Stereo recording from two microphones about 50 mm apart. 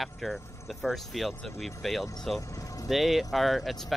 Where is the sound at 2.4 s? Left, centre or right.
Left.